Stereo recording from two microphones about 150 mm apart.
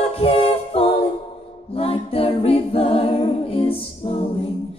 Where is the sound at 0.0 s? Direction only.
40° left (ahead or behind).